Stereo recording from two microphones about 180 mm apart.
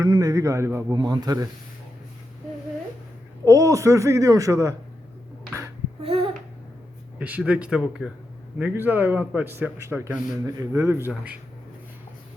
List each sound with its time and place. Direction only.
0.0 s a man's voice: 20° right (ahead or behind)
3.4 s a man's voice: 15° right (ahead or behind)
6.0 s babbling: 30° right (ahead or behind)
7.2 s a man's voice: 10° right (ahead or behind)